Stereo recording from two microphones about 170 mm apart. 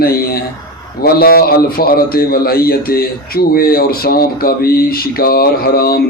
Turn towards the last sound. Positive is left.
turn(degrees=65)  # may be behind; listen again after turning